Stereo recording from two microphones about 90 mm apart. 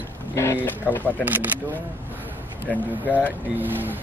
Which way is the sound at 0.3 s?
30° left (ahead or behind).